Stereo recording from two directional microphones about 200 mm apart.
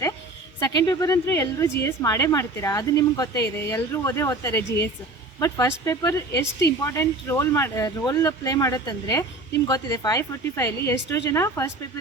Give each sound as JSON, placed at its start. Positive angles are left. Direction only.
{"t": 0.6, "sound": "a woman's voice", "side_deg": 15}
{"t": 6.4, "sound": "a woman's voice", "side_deg": 55}
{"t": 6.8, "sound": "a woman's voice", "side_deg": 10}